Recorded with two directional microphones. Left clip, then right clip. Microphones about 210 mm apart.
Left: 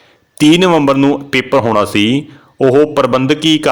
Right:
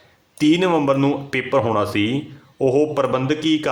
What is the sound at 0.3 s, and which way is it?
A man's voice, 35° left (ahead or behind).